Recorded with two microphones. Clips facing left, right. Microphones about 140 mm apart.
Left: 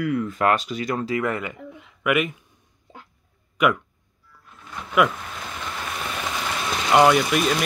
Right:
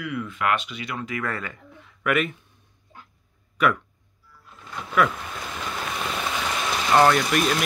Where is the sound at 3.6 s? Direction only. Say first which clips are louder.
Left 2 dB; 15° left (ahead or behind).